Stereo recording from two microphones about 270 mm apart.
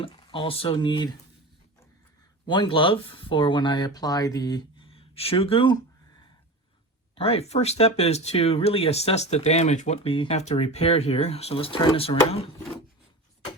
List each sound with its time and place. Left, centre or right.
0.0 s speech: centre
2.5 s speech: centre
7.2 s speech: left